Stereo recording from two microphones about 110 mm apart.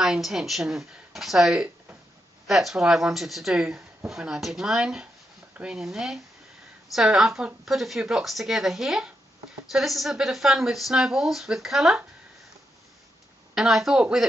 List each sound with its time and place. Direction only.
0.0 s speech: 5° right (ahead or behind)
13.6 s speech: 5° right (ahead or behind)